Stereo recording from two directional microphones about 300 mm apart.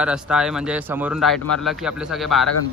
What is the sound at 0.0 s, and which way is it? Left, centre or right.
Speech, centre.